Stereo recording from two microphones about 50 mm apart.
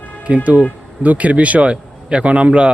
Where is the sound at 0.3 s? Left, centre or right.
Right.